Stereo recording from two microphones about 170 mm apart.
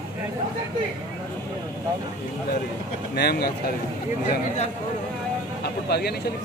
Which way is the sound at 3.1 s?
70° left (ahead or behind).